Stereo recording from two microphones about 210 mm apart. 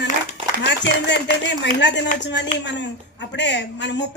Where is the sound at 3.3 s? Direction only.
55° left (ahead or behind).